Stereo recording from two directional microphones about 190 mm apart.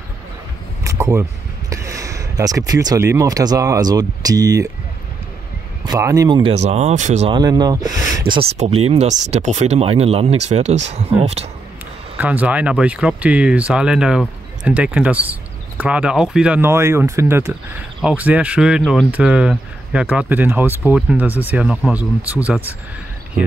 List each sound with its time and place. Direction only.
0.8 s a sound: 15° right (ahead or behind)
1.7 s speech: 15° right (ahead or behind)
5.9 s speech: 15° right (ahead or behind)
6.5 s speech: 35° right (ahead or behind)
7.2 s speech: 20° right (ahead or behind)
8.4 s speech: 30° right (ahead or behind)
12.2 s speech: 10° right (ahead or behind)